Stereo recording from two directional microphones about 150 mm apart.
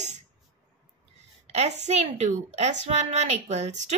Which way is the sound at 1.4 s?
50° right (ahead or behind).